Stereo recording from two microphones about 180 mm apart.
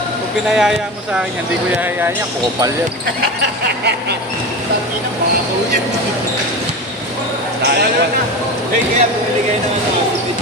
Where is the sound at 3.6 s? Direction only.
65° right (ahead or behind).